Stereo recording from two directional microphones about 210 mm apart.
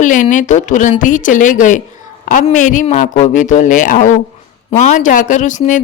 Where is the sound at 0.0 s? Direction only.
40° left (ahead or behind).